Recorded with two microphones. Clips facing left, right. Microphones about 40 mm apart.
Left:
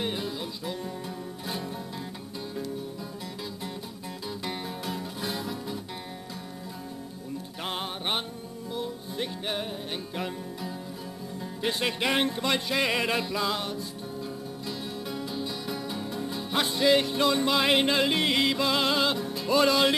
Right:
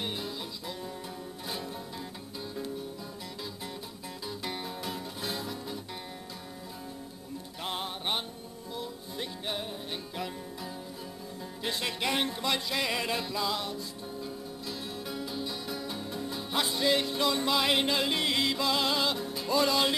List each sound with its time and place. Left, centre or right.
0.0 s music: centre
4.5 s music: centre
7.6 s music: left
11.6 s music: left
12.1 s speech: centre
12.4 s music: left
14.7 s music: centre
16.8 s music: left
17.5 s music: left
19.5 s music: left